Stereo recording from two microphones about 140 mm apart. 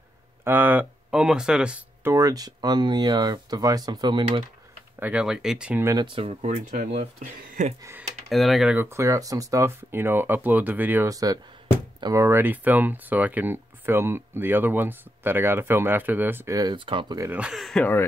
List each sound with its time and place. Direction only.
0.4 s speech: 15° right (ahead or behind)
2.0 s speech: 25° right (ahead or behind)
5.0 s speech: 5° right (ahead or behind)
6.0 s speech: 40° right (ahead or behind)
6.4 s speech: 60° right (ahead or behind)
8.3 s speech: centre (ahead or behind)
8.7 s speech: 20° right (ahead or behind)
16.7 s speech: 35° right (ahead or behind)
17.2 s speech: 10° right (ahead or behind)